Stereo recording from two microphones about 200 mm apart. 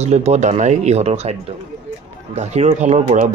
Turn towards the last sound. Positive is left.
turn(degrees=-35)  # may be behind; listen again after turning